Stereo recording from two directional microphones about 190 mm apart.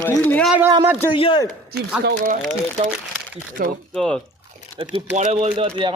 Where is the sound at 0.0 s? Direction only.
10° left (ahead or behind).